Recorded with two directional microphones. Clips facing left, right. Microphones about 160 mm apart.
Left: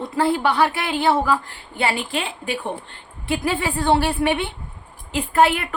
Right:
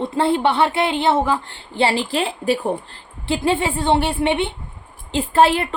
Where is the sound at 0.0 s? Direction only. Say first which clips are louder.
Right 2 dB; 25° right (ahead or behind).